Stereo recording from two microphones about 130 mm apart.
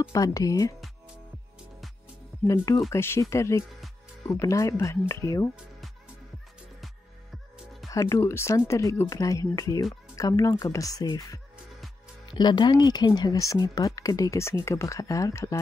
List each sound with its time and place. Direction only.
0.1 s speech: 25° left (ahead or behind)
2.4 s speech: 25° left (ahead or behind)
7.9 s speech: 25° left (ahead or behind)